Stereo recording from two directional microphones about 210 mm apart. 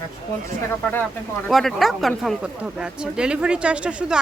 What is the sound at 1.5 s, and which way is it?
Speech, centre (ahead or behind).